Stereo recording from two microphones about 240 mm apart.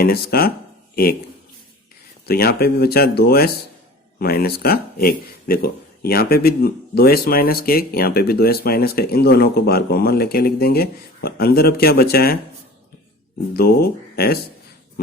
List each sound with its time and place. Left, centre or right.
0.0 s speech: left
2.2 s speech: left
13.6 s speech: left
15.0 s a sound: left